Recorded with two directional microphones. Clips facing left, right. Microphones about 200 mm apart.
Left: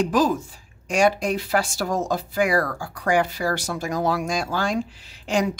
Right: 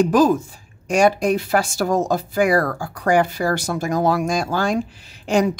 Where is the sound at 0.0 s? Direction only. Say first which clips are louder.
Right 5 dB; 50° right (ahead or behind).